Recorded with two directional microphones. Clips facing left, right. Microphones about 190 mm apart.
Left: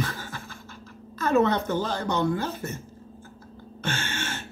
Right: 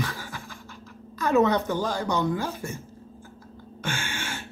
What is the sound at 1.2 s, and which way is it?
Speech, 15° right (ahead or behind).